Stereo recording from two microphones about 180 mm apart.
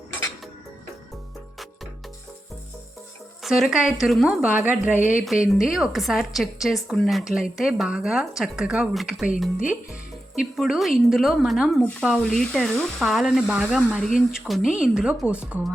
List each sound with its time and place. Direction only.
3.4 s a woman's voice: centre (ahead or behind)
4.9 s speech: 45° left (ahead or behind)
5.2 s a woman's voice: centre (ahead or behind)
10.3 s a woman's voice: centre (ahead or behind)